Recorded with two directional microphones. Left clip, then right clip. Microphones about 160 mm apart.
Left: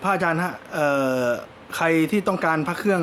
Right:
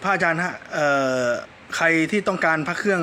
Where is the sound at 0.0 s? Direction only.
5° left (ahead or behind).